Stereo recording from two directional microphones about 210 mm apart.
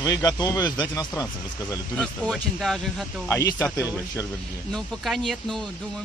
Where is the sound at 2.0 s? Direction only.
Centre (ahead or behind).